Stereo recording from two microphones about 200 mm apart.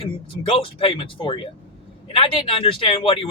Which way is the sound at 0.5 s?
25° left (ahead or behind).